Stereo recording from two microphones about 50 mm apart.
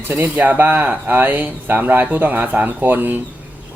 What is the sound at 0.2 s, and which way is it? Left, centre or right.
Speech, right.